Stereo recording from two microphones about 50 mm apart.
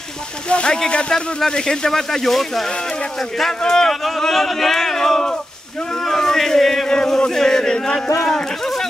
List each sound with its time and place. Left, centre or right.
0.5 s speech: left